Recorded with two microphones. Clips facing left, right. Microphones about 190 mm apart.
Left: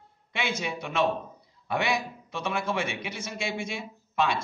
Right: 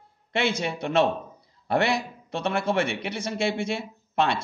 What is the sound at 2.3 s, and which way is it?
A man's voice, 65° right (ahead or behind).